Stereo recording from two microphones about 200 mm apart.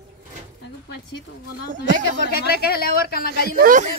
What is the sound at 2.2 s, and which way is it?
Speech, 50° left (ahead or behind).